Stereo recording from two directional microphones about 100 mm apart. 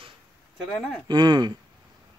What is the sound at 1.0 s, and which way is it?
Speech, 45° right (ahead or behind).